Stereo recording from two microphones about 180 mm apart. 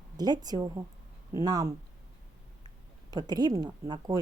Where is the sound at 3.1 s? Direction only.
20° right (ahead or behind).